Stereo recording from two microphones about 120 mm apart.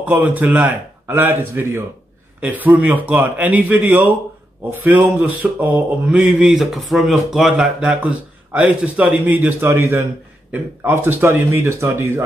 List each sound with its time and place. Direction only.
0.0 s speech: 15° right (ahead or behind)